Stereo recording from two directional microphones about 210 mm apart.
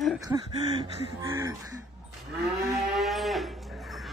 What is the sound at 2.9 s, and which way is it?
Cattle, centre (ahead or behind).